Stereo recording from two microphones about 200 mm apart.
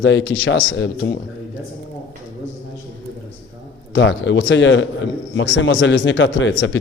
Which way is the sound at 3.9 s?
70° left (ahead or behind).